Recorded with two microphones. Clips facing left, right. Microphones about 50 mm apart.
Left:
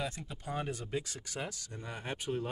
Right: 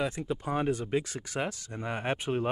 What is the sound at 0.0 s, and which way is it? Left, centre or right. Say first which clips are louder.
Speech: right 8 dB; right.